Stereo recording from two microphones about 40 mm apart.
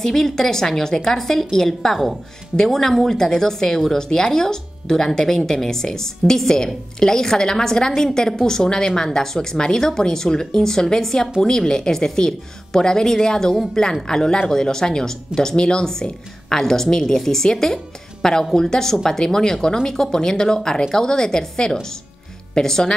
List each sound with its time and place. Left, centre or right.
0.0 s a woman's voice: centre